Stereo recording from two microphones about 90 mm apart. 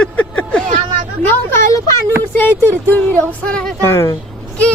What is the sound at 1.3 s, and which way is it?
A woman's voice, 30° left (ahead or behind).